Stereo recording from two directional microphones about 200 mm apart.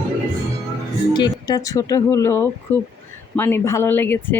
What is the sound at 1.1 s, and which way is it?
A woman's voice, 20° left (ahead or behind).